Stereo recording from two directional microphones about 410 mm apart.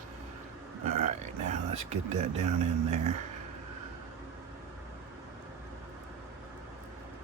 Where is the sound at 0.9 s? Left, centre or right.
Centre.